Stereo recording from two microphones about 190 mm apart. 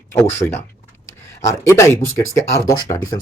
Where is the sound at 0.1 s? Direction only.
15° left (ahead or behind).